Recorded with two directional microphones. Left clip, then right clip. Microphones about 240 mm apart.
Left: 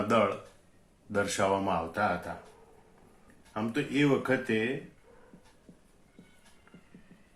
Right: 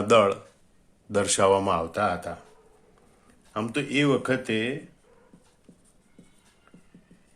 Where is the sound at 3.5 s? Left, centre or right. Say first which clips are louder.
Right 5 dB; right.